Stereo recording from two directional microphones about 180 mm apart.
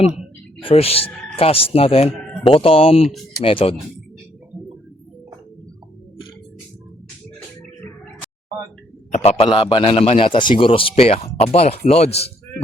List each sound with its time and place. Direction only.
0.6 s a man's voice: 30° left (ahead or behind)
9.1 s a man's voice: 35° left (ahead or behind)